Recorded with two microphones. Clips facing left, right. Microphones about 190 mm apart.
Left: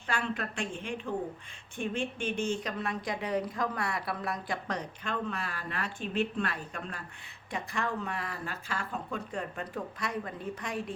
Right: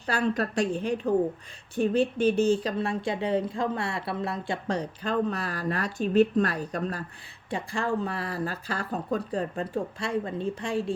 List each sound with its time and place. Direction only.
0.0 s speech: 40° right (ahead or behind)